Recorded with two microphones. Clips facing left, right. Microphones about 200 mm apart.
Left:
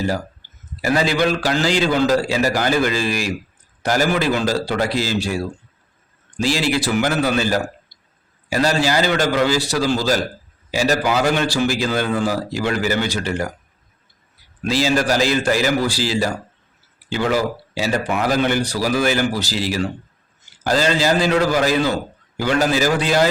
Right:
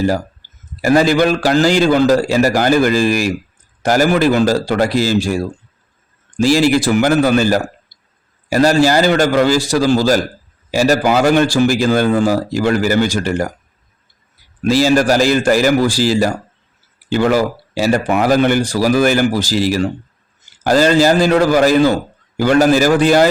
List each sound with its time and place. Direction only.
0.8 s a man's voice: 45° right (ahead or behind)
14.6 s a man's voice: 45° right (ahead or behind)